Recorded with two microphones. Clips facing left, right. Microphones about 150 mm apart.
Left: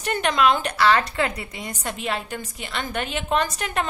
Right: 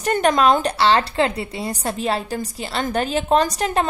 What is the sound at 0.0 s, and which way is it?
A woman's voice, 40° right (ahead or behind).